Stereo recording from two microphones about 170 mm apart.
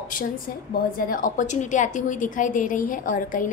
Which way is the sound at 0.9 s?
55° left (ahead or behind).